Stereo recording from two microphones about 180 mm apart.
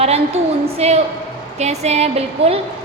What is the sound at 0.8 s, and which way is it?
A woman's voice, 35° right (ahead or behind).